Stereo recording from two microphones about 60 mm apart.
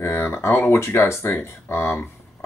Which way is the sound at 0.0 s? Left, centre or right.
Left.